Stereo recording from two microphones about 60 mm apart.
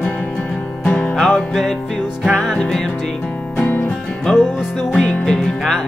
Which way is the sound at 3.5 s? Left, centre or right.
Left.